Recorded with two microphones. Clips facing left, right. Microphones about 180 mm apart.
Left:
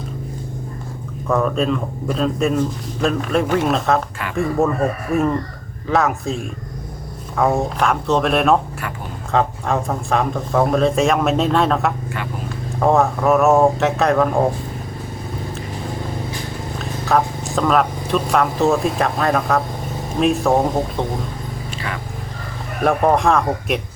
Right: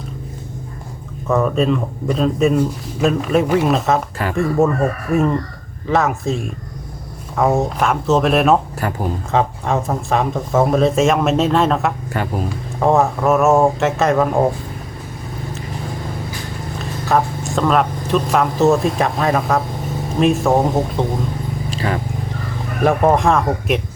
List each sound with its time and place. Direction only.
1.3 s speech: centre (ahead or behind)
16.7 s speech: centre (ahead or behind)
21.7 s vehicle: 35° right (ahead or behind)
22.8 s speech: centre (ahead or behind)